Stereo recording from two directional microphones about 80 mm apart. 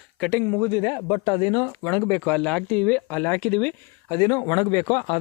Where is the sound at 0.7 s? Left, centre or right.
Left.